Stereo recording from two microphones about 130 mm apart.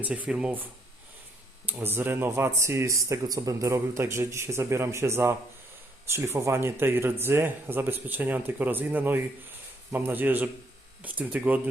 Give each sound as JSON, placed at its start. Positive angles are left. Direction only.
{"t": 0.0, "sound": "speech", "side_deg": -10}